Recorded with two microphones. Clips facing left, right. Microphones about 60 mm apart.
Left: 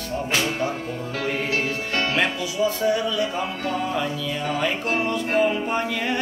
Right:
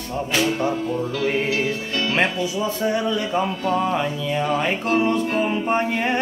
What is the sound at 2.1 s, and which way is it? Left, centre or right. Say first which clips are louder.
Music: right 4 dB; right.